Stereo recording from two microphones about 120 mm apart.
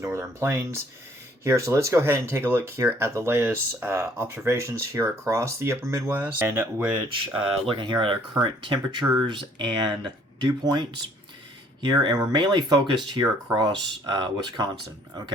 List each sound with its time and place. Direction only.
0.0 s speech: 25° right (ahead or behind)
7.1 s speech: 45° right (ahead or behind)